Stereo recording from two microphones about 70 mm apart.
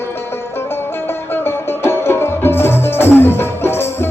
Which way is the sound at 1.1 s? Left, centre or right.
Left.